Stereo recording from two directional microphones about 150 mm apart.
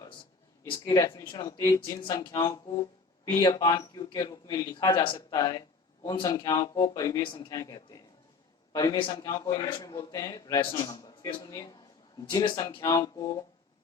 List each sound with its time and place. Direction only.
0.7 s a man's voice: 25° left (ahead or behind)